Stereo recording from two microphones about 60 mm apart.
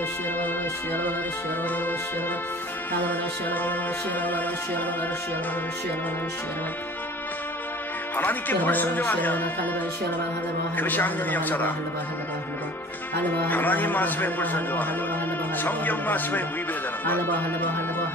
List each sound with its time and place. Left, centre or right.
2.9 s music: left
8.2 s speech: left
10.8 s speech: left
13.2 s speech: left